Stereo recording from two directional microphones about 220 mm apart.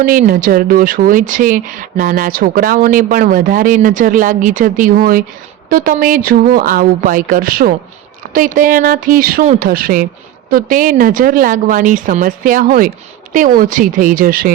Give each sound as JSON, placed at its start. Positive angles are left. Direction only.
{"t": 0.0, "sound": "speech", "side_deg": -40}